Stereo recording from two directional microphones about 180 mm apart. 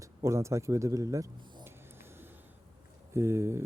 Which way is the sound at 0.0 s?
15° right (ahead or behind).